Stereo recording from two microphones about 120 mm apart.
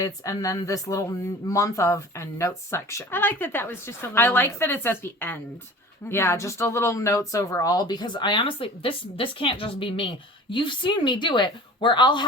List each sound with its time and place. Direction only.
0.0 s speech: 30° left (ahead or behind)